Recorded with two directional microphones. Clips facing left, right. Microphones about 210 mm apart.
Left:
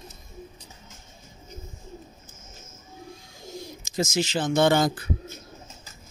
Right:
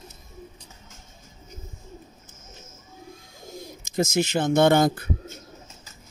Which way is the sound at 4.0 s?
55° right (ahead or behind).